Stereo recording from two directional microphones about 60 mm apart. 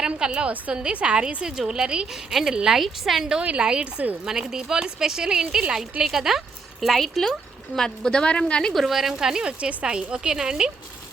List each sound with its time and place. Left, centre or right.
0.2 s speech: centre
3.4 s a woman's voice: centre
4.3 s a woman's voice: centre
8.7 s speech: centre